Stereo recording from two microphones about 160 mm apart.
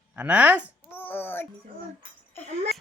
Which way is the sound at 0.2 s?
10° right (ahead or behind).